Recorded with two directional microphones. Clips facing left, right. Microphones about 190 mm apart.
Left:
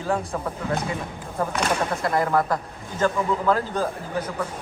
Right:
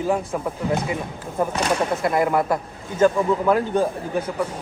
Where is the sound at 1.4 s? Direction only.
15° right (ahead or behind).